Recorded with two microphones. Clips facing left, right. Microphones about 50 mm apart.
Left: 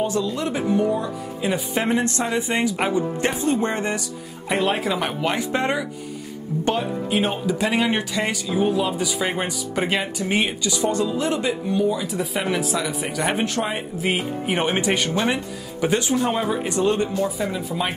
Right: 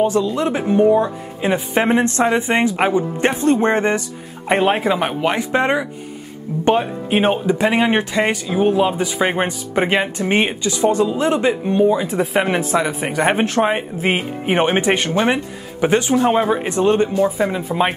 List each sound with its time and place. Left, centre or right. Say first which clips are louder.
0.0 s speech: right 6 dB; right